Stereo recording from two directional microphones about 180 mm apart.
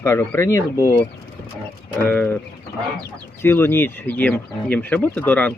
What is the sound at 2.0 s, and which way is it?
Speech, 10° left (ahead or behind).